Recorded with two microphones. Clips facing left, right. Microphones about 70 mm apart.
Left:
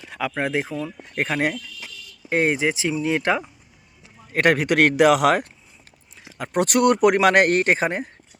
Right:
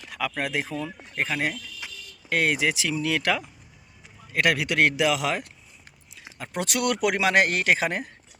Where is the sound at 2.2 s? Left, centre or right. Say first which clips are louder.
Left 3 dB; left.